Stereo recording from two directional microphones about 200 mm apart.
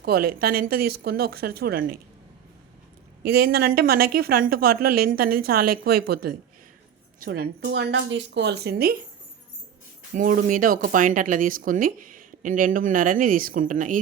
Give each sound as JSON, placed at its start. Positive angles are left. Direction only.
{"t": 0.0, "sound": "speech", "side_deg": -50}
{"t": 3.2, "sound": "speech", "side_deg": -50}
{"t": 10.2, "sound": "speech", "side_deg": -40}